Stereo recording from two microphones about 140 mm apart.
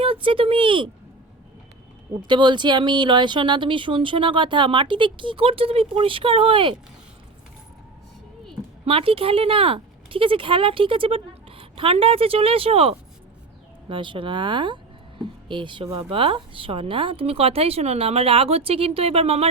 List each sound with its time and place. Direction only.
0.0 s speech: 40° right (ahead or behind)
2.2 s speech: 35° right (ahead or behind)
8.8 s a woman's voice: 40° right (ahead or behind)